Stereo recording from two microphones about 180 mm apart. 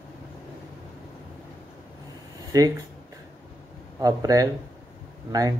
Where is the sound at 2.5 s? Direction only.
20° right (ahead or behind).